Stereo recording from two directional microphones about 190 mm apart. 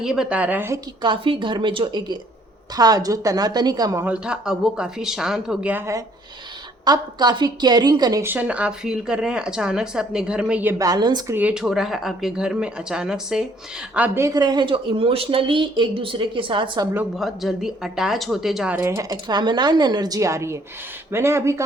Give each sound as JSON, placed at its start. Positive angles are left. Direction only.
{"t": 0.0, "sound": "a woman's voice", "side_deg": -5}
{"t": 1.0, "sound": "a woman's voice", "side_deg": -25}
{"t": 4.0, "sound": "a woman's voice", "side_deg": -5}
{"t": 11.3, "sound": "a woman's voice", "side_deg": -5}
{"t": 16.9, "sound": "a woman's voice", "side_deg": -5}